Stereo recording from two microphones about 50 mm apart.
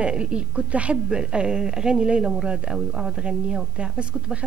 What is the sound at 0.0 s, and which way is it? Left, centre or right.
A woman's voice, right.